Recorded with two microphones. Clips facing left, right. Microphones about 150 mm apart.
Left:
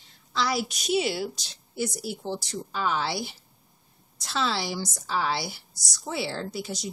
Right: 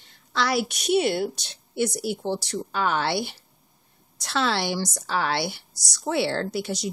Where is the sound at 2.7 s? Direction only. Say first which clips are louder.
Right 3 dB; 65° right (ahead or behind).